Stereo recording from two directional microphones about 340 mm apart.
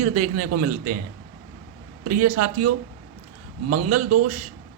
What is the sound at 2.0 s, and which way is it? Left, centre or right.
A man's voice, right.